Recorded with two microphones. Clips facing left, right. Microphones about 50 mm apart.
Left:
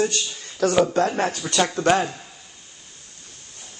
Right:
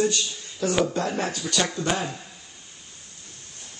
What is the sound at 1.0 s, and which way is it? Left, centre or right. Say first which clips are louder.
Speech: left 5 dB; left.